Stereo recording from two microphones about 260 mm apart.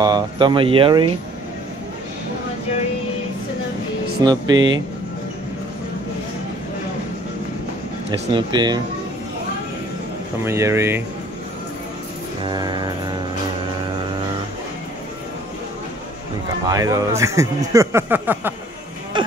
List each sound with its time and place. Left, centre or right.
0.0 s speech: centre
4.2 s speech: centre
4.6 s speech: right
8.3 s speech: centre
10.4 s speech: centre
12.4 s speech: centre
16.6 s speech: centre
19.1 s a sound: centre